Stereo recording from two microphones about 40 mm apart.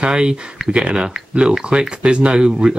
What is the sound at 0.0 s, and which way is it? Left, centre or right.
Speech, centre.